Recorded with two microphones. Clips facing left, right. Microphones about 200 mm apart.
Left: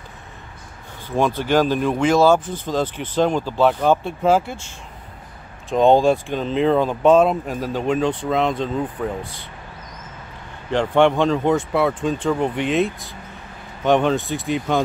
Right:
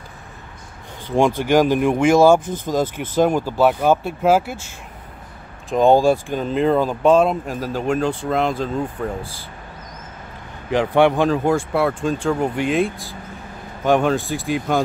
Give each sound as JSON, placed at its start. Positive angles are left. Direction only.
{"t": 1.0, "sound": "speech", "side_deg": -15}
{"t": 10.7, "sound": "speech", "side_deg": -10}